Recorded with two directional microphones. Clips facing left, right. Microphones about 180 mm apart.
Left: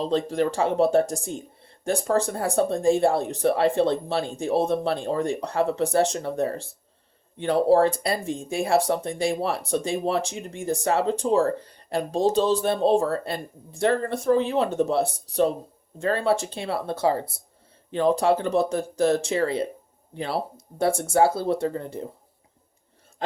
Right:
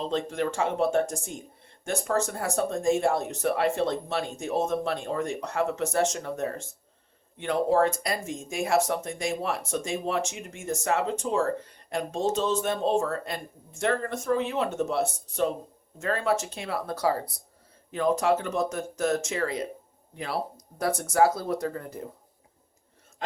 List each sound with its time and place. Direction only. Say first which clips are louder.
0.0 s speech: left 5 dB; 35° left (ahead or behind)